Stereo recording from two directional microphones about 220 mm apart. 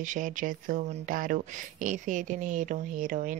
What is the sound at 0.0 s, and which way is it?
Speech, 35° right (ahead or behind).